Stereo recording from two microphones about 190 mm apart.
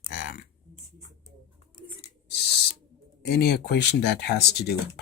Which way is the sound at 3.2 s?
55° left (ahead or behind).